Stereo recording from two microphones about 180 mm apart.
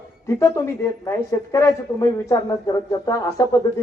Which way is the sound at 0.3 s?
15° left (ahead or behind).